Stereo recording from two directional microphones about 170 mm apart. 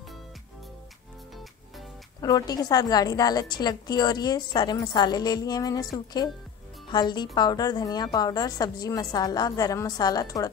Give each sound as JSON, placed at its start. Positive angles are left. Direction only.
{"t": 2.2, "sound": "a woman's voice", "side_deg": 20}